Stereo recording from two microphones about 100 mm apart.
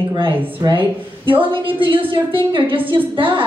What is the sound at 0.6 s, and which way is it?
A woman's voice, 50° right (ahead or behind).